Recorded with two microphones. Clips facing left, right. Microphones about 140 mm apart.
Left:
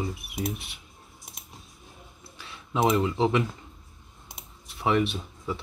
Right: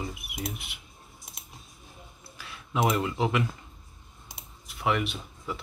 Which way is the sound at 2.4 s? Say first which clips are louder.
Left 2 dB; 25° left (ahead or behind).